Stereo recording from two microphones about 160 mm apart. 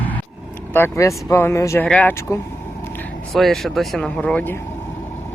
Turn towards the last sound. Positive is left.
turn(degrees=10)  # may be behind; listen again after turning